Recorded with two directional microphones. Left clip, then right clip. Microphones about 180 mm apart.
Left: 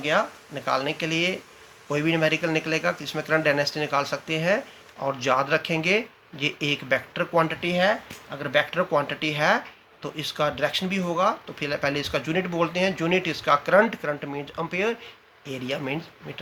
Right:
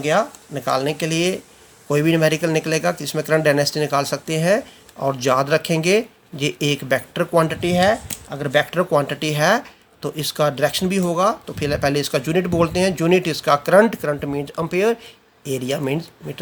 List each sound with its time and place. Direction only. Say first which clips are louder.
0.0 s speech: right 5 dB; 50° right (ahead or behind)